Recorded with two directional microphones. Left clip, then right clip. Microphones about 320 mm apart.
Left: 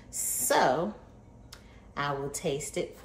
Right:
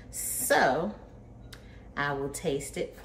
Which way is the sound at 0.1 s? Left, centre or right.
Centre.